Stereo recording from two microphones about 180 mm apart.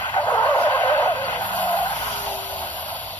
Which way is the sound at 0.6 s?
10° left (ahead or behind).